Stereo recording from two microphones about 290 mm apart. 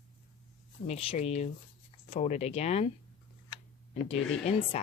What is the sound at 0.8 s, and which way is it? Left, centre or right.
Speech, left.